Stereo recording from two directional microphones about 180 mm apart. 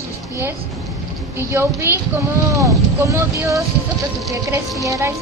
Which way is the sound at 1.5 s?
15° right (ahead or behind).